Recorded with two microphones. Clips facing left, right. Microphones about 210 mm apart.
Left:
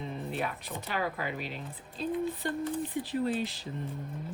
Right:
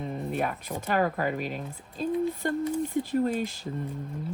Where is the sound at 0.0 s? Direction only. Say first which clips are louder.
Right 5 dB; 50° right (ahead or behind).